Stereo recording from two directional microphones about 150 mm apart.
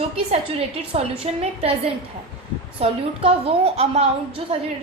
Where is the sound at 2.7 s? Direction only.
40° right (ahead or behind).